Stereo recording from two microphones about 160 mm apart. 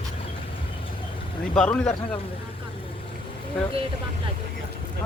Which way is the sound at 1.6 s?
5° left (ahead or behind).